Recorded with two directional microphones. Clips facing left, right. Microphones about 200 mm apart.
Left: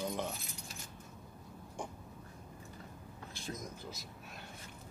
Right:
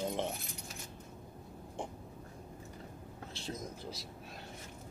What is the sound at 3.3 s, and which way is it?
Speech, 30° right (ahead or behind).